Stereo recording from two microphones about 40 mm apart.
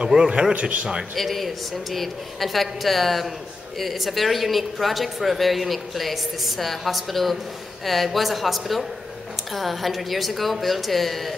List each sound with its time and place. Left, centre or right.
0.1 s a man's voice: centre
0.5 s a man's voice: right
1.1 s speech: centre